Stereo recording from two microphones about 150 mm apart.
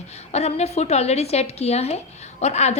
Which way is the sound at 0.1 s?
45° left (ahead or behind).